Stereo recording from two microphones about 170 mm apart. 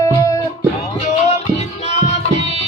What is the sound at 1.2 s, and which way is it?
Music, 40° left (ahead or behind).